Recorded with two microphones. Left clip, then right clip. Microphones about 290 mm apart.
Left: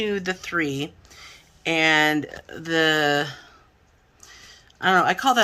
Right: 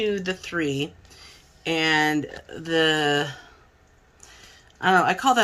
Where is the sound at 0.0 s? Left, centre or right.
Centre.